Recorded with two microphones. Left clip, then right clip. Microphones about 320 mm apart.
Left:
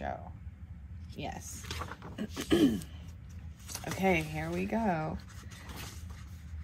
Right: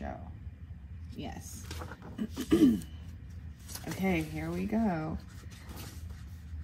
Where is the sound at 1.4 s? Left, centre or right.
Left.